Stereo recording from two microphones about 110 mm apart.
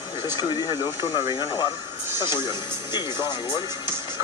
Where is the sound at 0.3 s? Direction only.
40° left (ahead or behind).